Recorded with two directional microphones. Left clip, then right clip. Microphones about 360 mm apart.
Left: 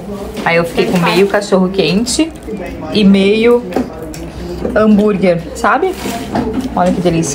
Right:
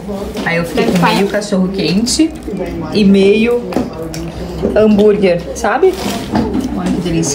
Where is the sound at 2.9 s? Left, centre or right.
Left.